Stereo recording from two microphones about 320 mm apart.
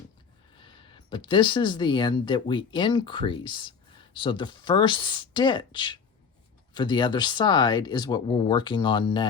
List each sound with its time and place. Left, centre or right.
0.6 s speech: centre